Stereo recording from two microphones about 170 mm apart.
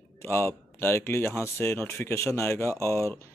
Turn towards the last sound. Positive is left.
turn(degrees=15)  # may be behind; listen again after turning